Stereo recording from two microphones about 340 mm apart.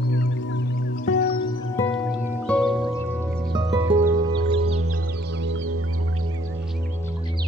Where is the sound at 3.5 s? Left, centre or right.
Centre.